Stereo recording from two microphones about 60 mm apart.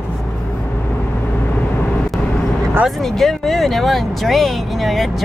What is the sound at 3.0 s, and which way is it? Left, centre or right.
Speech, centre.